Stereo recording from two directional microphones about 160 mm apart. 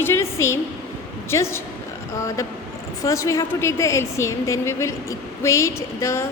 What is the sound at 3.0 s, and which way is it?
A woman's voice, 20° left (ahead or behind).